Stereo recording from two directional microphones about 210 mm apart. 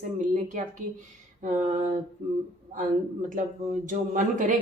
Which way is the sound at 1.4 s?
35° right (ahead or behind).